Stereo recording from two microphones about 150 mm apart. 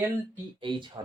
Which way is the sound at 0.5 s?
35° right (ahead or behind).